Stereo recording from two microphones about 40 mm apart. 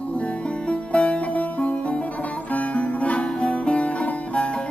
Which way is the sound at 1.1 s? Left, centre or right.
Left.